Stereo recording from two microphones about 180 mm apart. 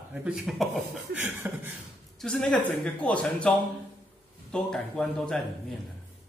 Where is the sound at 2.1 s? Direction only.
Centre (ahead or behind).